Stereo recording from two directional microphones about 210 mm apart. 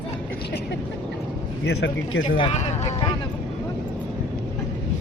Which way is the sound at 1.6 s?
60° left (ahead or behind).